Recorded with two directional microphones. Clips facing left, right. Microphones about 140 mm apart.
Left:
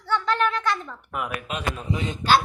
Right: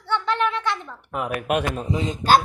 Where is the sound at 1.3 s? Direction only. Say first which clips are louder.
Right 9 dB; 60° right (ahead or behind).